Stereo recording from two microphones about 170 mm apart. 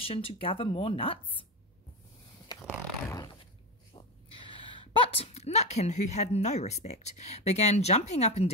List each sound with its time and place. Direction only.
0.0 s speech: 35° left (ahead or behind)
3.9 s snort: 30° left (ahead or behind)
5.0 s speech: 35° left (ahead or behind)